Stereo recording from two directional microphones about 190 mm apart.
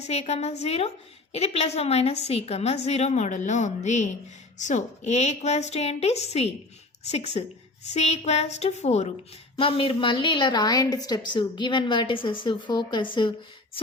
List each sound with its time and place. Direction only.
0.1 s a woman's voice: 35° left (ahead or behind)